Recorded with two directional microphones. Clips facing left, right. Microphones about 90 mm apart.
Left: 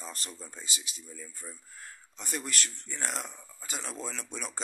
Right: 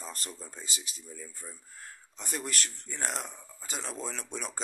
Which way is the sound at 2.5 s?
35° right (ahead or behind).